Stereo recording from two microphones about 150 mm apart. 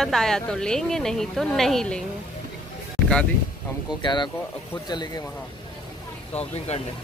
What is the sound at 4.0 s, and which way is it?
Speech, 30° left (ahead or behind).